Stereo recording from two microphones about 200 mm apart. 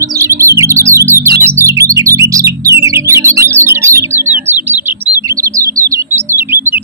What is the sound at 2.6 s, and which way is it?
Music, 15° right (ahead or behind).